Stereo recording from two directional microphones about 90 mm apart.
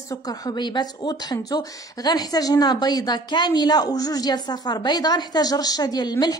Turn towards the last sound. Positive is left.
turn(degrees=50)  # may be behind; listen again after turning